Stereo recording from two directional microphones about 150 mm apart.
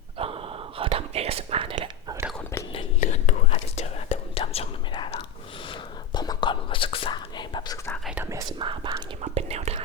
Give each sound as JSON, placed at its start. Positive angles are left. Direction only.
{"t": 0.2, "sound": "whispering", "side_deg": -40}
{"t": 3.0, "sound": "whispering", "side_deg": 55}
{"t": 8.0, "sound": "whispering", "side_deg": -10}
{"t": 8.3, "sound": "whispering", "side_deg": -25}
{"t": 9.2, "sound": "whispering", "side_deg": -45}